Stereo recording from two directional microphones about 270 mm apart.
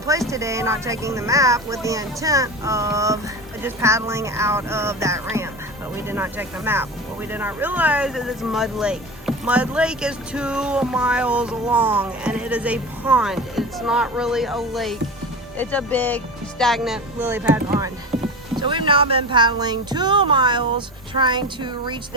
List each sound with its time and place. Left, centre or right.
0.1 s speech: centre